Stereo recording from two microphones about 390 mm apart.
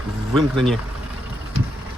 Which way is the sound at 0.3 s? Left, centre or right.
Centre.